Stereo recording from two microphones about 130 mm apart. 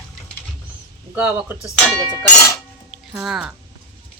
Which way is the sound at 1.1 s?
15° right (ahead or behind).